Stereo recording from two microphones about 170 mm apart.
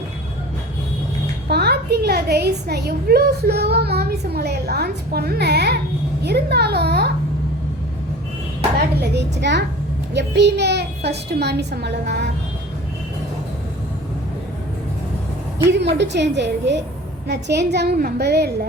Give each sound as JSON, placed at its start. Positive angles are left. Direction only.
{"t": 1.5, "sound": "a woman's voice", "side_deg": -70}
{"t": 9.0, "sound": "a woman's voice", "side_deg": -85}
{"t": 15.5, "sound": "a woman's voice", "side_deg": -85}